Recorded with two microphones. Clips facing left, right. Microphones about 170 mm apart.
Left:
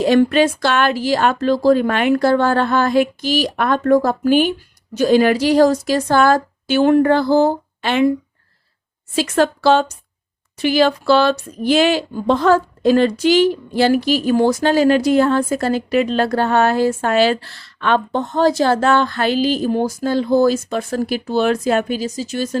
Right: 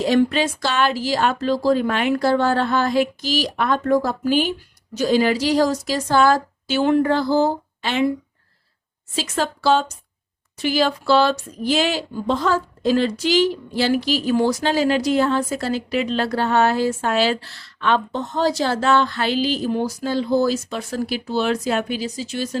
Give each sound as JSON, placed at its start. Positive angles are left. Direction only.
{"t": 0.0, "sound": "speech", "side_deg": 55}
{"t": 9.1, "sound": "speech", "side_deg": 60}